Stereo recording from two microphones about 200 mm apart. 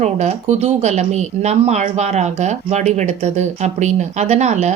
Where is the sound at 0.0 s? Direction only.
35° right (ahead or behind).